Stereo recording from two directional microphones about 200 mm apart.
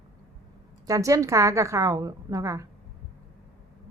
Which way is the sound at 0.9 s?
15° right (ahead or behind).